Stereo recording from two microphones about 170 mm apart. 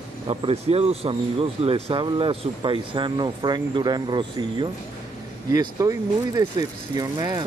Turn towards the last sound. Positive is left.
turn(degrees=-20)  # may be behind; listen again after turning